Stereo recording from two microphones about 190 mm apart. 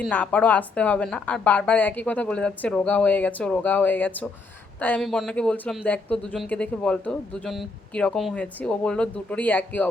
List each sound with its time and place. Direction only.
0.0 s a woman's voice: 10° left (ahead or behind)